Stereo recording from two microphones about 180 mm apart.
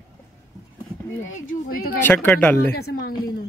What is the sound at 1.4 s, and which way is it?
Speech, 55° left (ahead or behind).